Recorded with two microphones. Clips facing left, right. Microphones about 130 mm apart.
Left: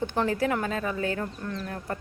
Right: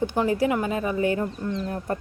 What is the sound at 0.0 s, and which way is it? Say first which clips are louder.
Speech: right 4 dB; 10° right (ahead or behind).